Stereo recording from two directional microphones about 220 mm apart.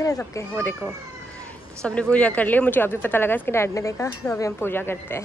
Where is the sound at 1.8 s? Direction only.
5° left (ahead or behind).